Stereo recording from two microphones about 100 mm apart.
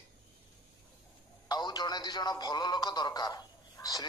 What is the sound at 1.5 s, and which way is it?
A man's voice, 45° left (ahead or behind).